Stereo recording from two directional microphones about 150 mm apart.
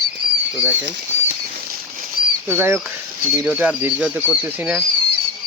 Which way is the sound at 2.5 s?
15° right (ahead or behind).